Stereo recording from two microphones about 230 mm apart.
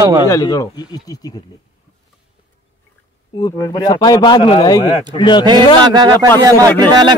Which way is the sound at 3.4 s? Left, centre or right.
Centre.